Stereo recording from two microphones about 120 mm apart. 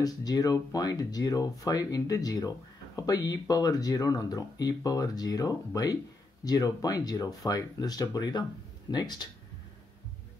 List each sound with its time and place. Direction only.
0.0 s speech: 30° left (ahead or behind)